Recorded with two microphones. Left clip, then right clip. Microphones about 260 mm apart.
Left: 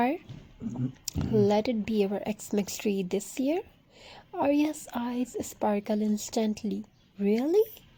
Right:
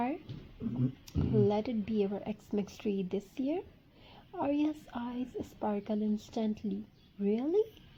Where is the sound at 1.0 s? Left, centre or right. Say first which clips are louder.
Left 5 dB; left.